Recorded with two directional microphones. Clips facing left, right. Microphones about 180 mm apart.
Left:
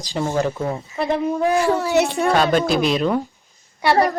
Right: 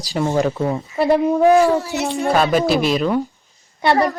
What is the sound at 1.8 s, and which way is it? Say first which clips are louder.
Speech: left 4 dB; 65° left (ahead or behind).